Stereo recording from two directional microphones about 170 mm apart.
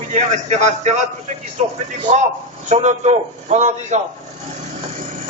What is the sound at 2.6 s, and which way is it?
A man's voice, 45° right (ahead or behind).